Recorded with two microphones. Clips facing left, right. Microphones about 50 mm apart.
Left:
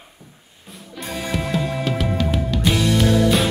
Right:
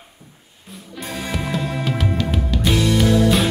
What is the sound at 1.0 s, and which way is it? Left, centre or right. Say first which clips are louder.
Music: left 1 dB; centre.